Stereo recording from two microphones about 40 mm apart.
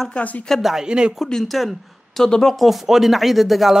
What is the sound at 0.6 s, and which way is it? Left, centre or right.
Speech, centre.